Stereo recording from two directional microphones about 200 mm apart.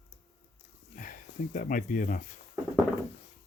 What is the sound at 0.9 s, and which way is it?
Speech, 40° left (ahead or behind).